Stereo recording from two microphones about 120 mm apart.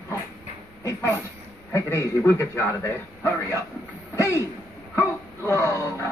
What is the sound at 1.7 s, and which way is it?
A man's voice, 25° left (ahead or behind).